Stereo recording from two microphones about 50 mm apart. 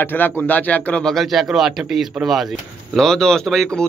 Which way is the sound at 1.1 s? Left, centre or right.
Centre.